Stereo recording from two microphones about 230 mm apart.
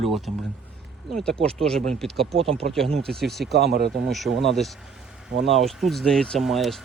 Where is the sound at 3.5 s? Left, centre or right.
Right.